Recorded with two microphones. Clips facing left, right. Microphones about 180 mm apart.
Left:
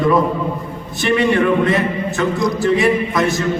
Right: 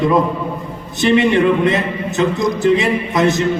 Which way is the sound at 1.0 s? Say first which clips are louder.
Right 2 dB; 20° right (ahead or behind).